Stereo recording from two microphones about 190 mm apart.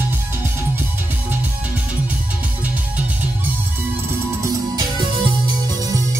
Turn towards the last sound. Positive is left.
turn(degrees=-20)  # may be behind; listen again after turning